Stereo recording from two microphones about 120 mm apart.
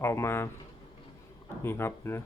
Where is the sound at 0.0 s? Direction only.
20° left (ahead or behind).